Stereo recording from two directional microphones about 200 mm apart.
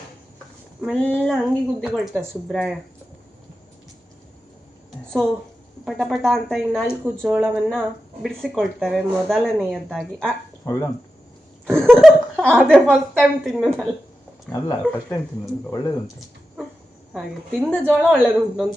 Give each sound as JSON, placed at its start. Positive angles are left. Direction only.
{"t": 0.8, "sound": "speech", "side_deg": 0}
{"t": 5.8, "sound": "speech", "side_deg": 0}
{"t": 10.7, "sound": "speech", "side_deg": 15}
{"t": 11.7, "sound": "speech", "side_deg": 5}
{"t": 14.5, "sound": "speech", "side_deg": 15}
{"t": 17.2, "sound": "speech", "side_deg": 5}